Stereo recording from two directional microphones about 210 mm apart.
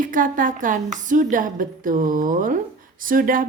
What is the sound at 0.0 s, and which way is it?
Speech, 40° right (ahead or behind).